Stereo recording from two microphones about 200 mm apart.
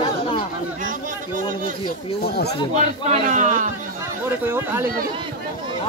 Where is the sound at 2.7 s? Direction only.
35° right (ahead or behind).